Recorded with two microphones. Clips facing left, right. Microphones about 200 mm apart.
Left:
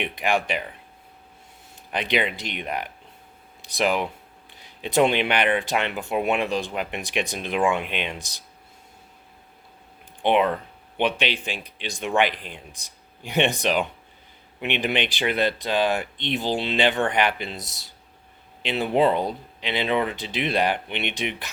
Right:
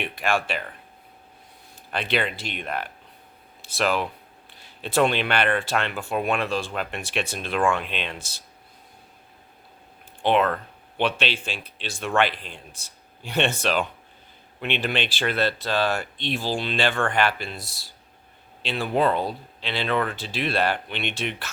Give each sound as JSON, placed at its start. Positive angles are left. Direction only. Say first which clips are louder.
{"t": 0.0, "sound": "speech", "louder": "left 1 dB", "side_deg": 20}
{"t": 1.9, "sound": "speech", "louder": "left 1 dB", "side_deg": 15}
{"t": 10.2, "sound": "speech", "louder": "left 1 dB", "side_deg": 15}